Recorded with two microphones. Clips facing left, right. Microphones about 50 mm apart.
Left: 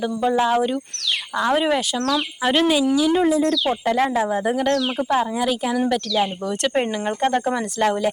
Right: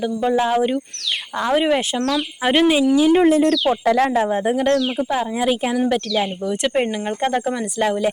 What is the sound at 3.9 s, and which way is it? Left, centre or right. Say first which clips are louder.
Speech: right 3 dB; right.